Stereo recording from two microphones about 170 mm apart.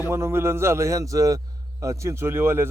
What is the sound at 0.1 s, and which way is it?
Speech, 15° right (ahead or behind).